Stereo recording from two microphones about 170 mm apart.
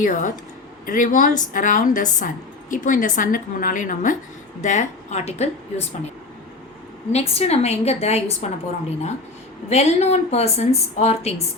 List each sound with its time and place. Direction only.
0.0 s speech: 50° left (ahead or behind)
7.1 s a woman's voice: 40° left (ahead or behind)
9.6 s a woman's voice: 40° left (ahead or behind)